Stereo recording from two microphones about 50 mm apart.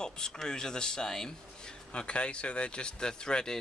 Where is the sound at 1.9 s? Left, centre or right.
Left.